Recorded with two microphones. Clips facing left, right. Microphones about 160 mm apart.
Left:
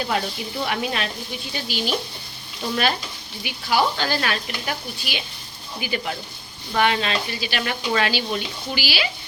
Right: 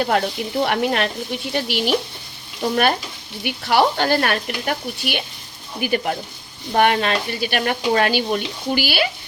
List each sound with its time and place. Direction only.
0.0 s speech: 60° right (ahead or behind)
3.4 s speech: 65° right (ahead or behind)